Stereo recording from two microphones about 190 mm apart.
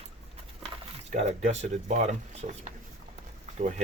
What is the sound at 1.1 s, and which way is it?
Speech, 35° right (ahead or behind).